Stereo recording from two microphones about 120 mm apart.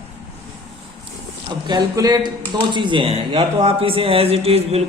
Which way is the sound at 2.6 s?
40° right (ahead or behind).